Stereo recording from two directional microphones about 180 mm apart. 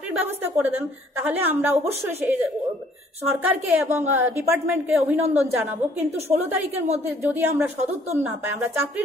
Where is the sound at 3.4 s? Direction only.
10° right (ahead or behind).